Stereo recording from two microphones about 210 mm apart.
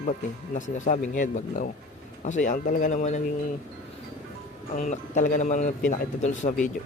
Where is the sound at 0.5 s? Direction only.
35° left (ahead or behind).